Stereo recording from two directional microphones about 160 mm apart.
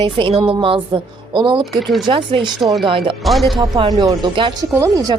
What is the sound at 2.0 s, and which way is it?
Speech, 30° right (ahead or behind).